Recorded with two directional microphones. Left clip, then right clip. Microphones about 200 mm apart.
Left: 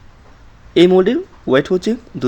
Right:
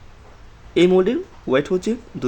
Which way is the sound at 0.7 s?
15° left (ahead or behind).